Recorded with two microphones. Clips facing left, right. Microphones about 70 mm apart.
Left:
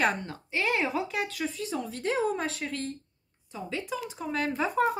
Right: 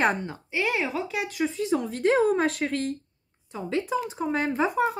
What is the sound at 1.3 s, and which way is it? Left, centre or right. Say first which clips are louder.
Speech: right 7 dB; right.